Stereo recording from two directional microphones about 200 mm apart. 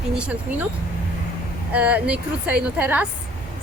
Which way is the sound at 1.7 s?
5° right (ahead or behind).